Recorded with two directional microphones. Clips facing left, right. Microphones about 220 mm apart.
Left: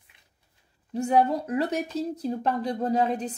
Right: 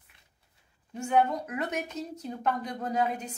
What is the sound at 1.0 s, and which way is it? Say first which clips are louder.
Speech: left 4 dB; 35° left (ahead or behind).